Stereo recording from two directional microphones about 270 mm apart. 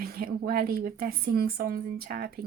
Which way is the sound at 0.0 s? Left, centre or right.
Right.